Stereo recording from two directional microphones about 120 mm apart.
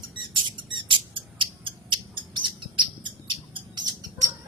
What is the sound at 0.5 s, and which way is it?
Bird, 45° right (ahead or behind).